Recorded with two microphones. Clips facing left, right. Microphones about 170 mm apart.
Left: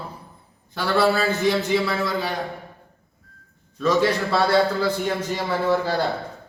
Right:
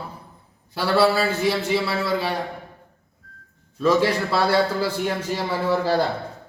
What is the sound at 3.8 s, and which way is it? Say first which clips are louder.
Speech: right 1 dB; 5° right (ahead or behind).